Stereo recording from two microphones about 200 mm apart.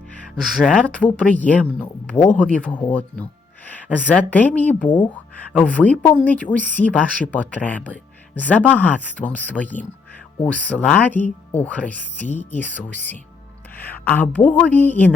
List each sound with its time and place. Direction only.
0.6 s speech: 5° left (ahead or behind)
4.9 s speech: 25° left (ahead or behind)
5.1 s a woman's voice: 10° left (ahead or behind)